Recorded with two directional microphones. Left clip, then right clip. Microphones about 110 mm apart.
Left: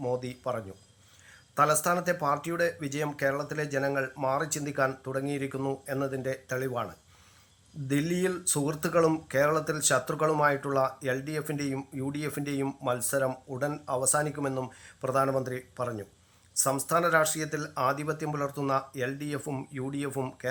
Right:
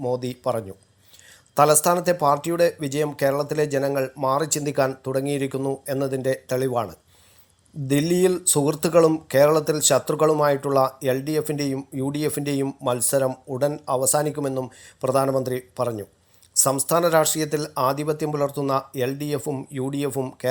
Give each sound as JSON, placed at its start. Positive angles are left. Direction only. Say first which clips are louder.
{"t": 0.2, "sound": "speech", "louder": "right 8 dB", "side_deg": -35}
{"t": 7.9, "sound": "speech", "louder": "right 9 dB", "side_deg": -35}
{"t": 13.2, "sound": "speech", "louder": "right 6 dB", "side_deg": -15}
{"t": 13.8, "sound": "speech", "louder": "right 7 dB", "side_deg": -35}